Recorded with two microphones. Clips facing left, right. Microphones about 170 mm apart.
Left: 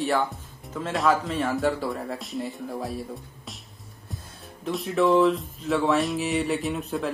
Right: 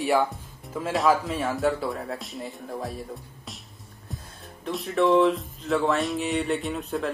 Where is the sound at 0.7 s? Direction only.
5° right (ahead or behind).